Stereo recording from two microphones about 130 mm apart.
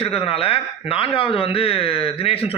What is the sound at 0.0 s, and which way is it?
Speech, 50° left (ahead or behind).